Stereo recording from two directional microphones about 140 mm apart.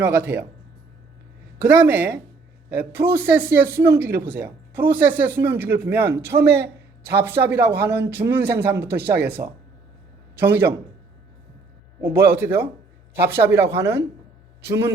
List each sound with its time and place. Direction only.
0.0 s speech: 15° right (ahead or behind)
1.6 s speech: 10° right (ahead or behind)
6.3 s speech: 45° right (ahead or behind)
7.1 s speech: 15° right (ahead or behind)
9.4 s speech: 30° right (ahead or behind)
10.3 s speech: 15° right (ahead or behind)
11.9 s speech: 20° right (ahead or behind)